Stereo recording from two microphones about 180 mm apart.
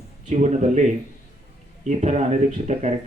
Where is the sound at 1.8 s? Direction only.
40° right (ahead or behind).